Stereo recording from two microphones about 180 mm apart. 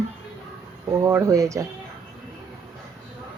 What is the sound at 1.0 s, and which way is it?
Speech, 15° right (ahead or behind).